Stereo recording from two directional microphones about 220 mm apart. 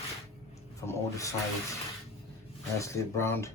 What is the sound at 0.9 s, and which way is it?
Speech, 15° left (ahead or behind).